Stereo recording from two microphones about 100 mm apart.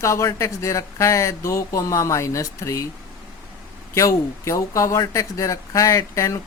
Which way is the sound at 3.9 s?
30° left (ahead or behind).